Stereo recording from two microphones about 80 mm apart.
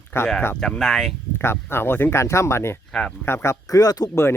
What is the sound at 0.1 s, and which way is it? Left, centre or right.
Speech, left.